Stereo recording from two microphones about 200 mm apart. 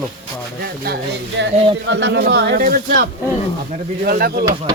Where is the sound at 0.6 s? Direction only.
50° right (ahead or behind).